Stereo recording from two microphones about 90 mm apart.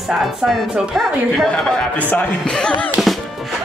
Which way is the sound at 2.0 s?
15° left (ahead or behind).